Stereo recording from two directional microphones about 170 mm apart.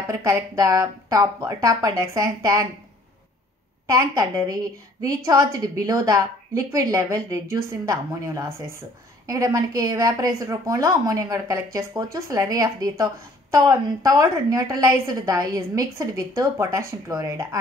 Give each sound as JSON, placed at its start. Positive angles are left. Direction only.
{"t": 0.1, "sound": "a woman's voice", "side_deg": -20}
{"t": 3.8, "sound": "a woman's voice", "side_deg": -20}